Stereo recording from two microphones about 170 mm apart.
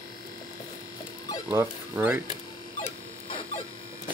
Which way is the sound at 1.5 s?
10° right (ahead or behind).